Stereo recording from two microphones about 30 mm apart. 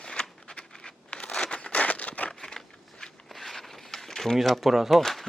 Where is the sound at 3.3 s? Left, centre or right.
Centre.